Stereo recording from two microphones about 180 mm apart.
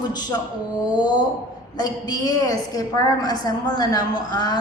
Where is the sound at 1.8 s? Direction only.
20° left (ahead or behind).